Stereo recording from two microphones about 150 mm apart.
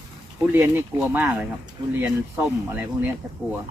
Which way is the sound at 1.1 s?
10° right (ahead or behind).